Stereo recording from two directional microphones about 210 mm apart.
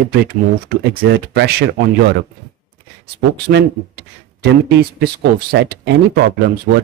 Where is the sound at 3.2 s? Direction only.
50° right (ahead or behind).